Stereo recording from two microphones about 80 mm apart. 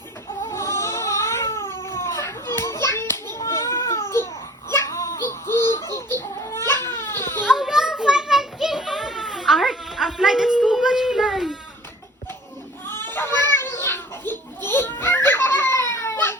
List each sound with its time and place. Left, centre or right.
0.5 s crying: left
2.1 s children playing: left
2.9 s hands: left
4.7 s a sound: left
6.5 s crying: left
7.4 s children playing: centre
12.9 s children playing: left